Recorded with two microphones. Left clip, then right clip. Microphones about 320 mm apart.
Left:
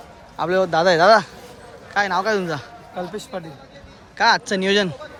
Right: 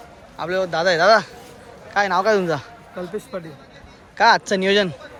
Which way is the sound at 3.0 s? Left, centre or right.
Centre.